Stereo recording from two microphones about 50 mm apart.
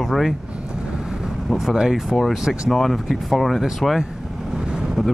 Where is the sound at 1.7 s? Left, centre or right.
Centre.